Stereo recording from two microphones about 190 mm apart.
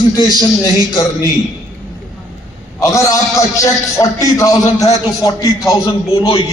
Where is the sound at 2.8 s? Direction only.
15° left (ahead or behind).